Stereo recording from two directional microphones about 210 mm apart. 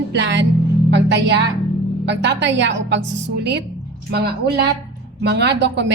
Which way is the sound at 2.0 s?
55° right (ahead or behind).